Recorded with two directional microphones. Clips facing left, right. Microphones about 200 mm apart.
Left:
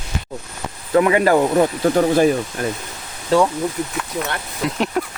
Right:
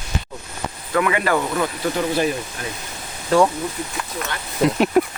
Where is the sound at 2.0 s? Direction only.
45° left (ahead or behind).